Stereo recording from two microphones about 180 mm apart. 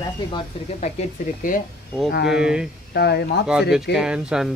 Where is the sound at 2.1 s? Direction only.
65° left (ahead or behind).